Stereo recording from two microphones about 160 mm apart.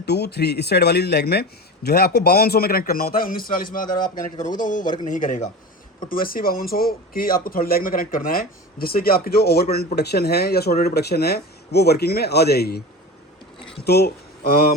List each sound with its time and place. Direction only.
0.0 s speech: 90° left; by 5.5 s 50° left (ahead or behind)
6.1 s speech: 65° left (ahead or behind); by 12.8 s 80° left
13.8 s speech: 80° left